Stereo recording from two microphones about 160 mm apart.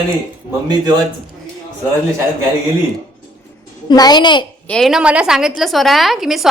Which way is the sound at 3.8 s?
25° left (ahead or behind).